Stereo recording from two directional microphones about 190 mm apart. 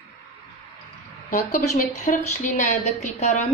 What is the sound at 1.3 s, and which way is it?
A woman's voice, 45° left (ahead or behind).